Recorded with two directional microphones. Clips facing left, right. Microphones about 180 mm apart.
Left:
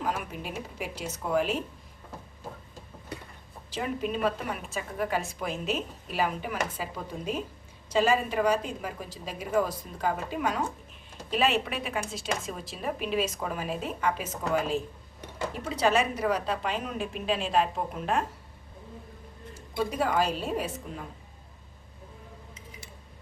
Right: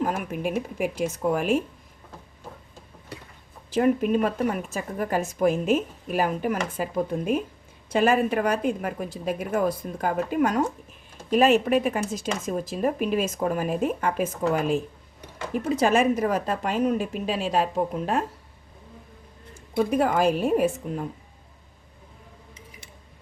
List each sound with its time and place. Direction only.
0.0 s a woman's voice: 50° right (ahead or behind)
3.7 s speech: 50° right (ahead or behind)
7.9 s a woman's voice: 55° right (ahead or behind); by 18.2 s 40° right (ahead or behind)
19.5 s speech: 55° right (ahead or behind)